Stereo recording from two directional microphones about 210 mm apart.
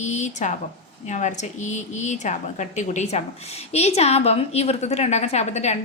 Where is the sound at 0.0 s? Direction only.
35° left (ahead or behind).